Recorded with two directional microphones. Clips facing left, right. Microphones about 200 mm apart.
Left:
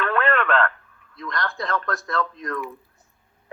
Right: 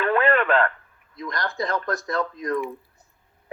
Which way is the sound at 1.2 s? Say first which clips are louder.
Right 1 dB; 20° right (ahead or behind).